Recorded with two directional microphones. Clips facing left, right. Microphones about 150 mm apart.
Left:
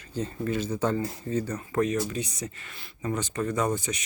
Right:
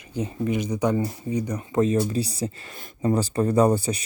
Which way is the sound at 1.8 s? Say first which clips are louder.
Right 5 dB; 25° right (ahead or behind).